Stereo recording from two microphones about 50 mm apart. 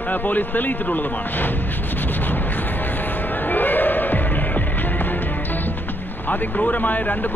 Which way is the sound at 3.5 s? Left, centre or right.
Left.